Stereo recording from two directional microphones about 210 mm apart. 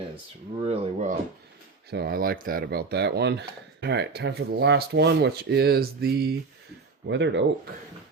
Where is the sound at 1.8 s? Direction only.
50° right (ahead or behind).